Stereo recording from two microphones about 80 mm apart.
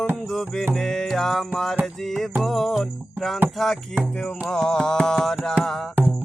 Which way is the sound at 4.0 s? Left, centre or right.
Centre.